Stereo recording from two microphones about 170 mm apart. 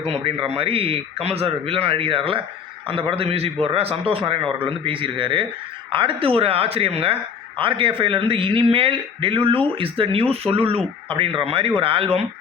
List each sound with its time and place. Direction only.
0.0 s speech: 35° right (ahead or behind)